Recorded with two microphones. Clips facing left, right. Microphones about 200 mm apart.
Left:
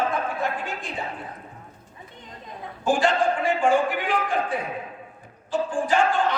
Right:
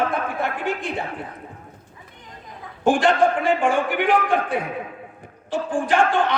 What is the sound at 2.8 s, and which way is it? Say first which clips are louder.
A man's voice: right 4 dB; 80° right.